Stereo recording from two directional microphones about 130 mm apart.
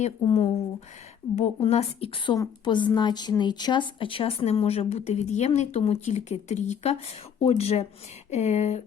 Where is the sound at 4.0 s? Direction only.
45° left (ahead or behind).